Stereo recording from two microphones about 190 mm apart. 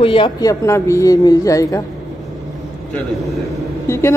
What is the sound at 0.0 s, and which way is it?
A woman's voice, 25° left (ahead or behind).